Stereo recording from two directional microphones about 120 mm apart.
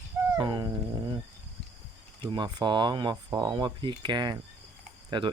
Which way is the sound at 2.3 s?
40° right (ahead or behind).